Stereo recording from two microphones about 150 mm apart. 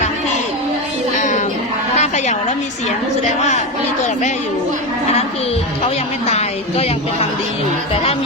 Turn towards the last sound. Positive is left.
turn(degrees=45)  # may be behind; listen again after turning